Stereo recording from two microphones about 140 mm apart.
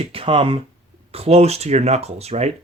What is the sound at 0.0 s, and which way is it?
Speech, 45° right (ahead or behind).